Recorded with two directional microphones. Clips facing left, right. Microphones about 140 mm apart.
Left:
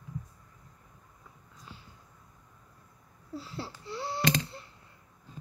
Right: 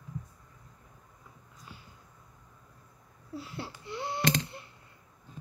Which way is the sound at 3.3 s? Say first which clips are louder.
Even; 20° right (ahead or behind).